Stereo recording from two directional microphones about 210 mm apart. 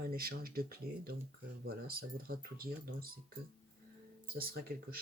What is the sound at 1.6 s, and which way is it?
Speech, 45° right (ahead or behind).